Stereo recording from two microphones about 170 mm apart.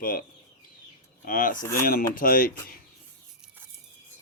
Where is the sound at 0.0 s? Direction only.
60° left (ahead or behind).